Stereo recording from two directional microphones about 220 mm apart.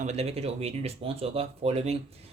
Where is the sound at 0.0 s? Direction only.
30° right (ahead or behind).